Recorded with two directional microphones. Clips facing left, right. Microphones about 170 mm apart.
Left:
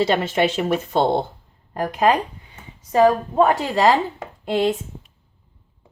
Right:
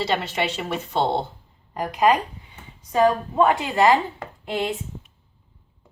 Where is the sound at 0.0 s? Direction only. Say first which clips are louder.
Left 6 dB; 50° left (ahead or behind).